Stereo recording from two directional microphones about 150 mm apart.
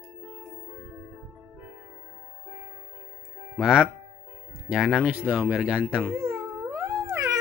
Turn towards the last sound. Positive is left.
turn(degrees=-20)  # may be behind; listen again after turning